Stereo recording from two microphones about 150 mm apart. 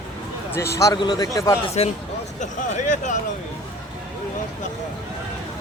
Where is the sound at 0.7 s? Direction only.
25° left (ahead or behind).